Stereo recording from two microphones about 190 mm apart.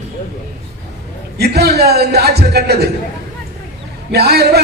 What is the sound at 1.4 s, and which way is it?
A man's voice, 55° right (ahead or behind).